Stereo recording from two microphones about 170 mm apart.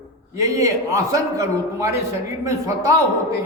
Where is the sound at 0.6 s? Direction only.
20° right (ahead or behind).